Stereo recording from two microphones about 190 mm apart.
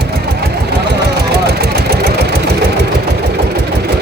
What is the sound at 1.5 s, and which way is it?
Vehicle, 55° right (ahead or behind).